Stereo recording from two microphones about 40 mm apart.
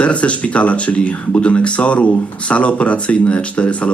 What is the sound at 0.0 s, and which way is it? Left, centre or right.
Speech, left.